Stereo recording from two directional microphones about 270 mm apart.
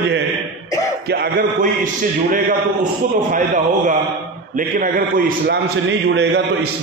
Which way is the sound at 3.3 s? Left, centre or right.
Right.